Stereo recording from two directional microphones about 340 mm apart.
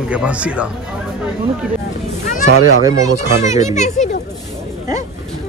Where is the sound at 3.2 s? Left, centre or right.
Centre.